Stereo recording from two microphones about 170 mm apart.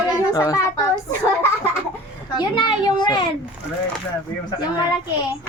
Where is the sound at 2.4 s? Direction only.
25° left (ahead or behind).